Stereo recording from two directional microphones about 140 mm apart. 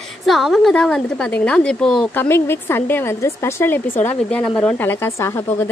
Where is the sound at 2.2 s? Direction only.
15° left (ahead or behind).